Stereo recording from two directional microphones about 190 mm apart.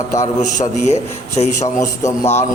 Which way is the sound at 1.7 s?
15° left (ahead or behind).